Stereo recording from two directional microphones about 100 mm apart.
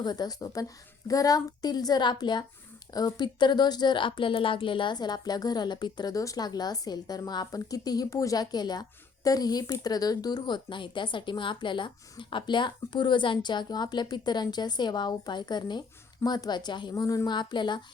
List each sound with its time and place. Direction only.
0.0 s a woman's voice: 45° left (ahead or behind)
16.9 s speech: 35° left (ahead or behind); by 17.8 s 50° left (ahead or behind)